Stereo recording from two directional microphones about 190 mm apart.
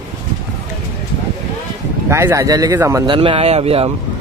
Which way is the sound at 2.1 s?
15° right (ahead or behind).